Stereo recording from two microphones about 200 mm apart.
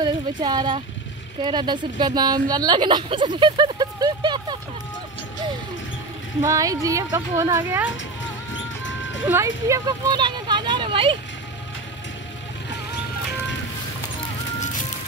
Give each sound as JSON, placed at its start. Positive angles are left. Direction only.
{"t": 0.0, "sound": "a woman's voice", "side_deg": -20}
{"t": 6.4, "sound": "speech", "side_deg": -15}
{"t": 9.2, "sound": "speech", "side_deg": -15}